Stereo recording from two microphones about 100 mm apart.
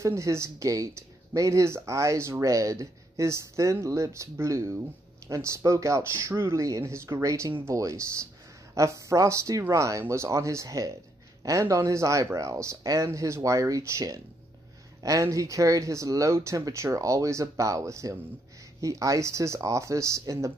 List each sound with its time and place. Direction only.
0.0 s speech: 30° right (ahead or behind)